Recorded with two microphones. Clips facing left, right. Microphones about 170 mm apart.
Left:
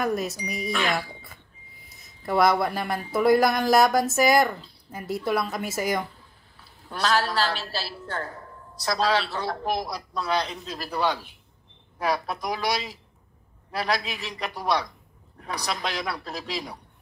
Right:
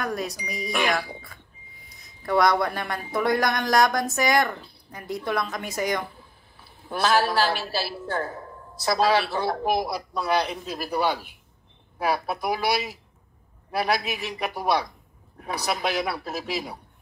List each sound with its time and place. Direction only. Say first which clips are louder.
0.0 s speech: left 3 dB; 5° left (ahead or behind)
0.7 s a woman's voice: right 2 dB; 15° right (ahead or behind)
1.2 s a sound: right 1 dB; centre (ahead or behind)
3.1 s speech: left 4 dB; 5° left (ahead or behind)
6.9 s a woman's voice: right 3 dB; 10° right (ahead or behind)